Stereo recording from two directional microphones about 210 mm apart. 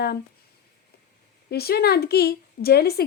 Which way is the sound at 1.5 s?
50° left (ahead or behind).